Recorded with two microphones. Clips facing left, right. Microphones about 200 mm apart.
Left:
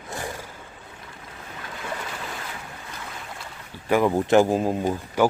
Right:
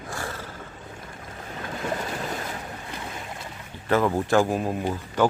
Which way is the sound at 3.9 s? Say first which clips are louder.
Left 2 dB; 15° left (ahead or behind).